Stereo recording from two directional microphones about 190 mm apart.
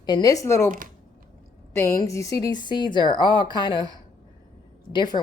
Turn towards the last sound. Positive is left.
turn(degrees=25)  # may be behind; listen again after turning